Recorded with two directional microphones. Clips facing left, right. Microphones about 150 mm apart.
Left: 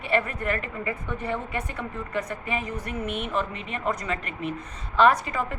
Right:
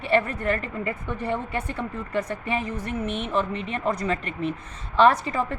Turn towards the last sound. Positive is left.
turn(degrees=-30)  # may be behind; listen again after turning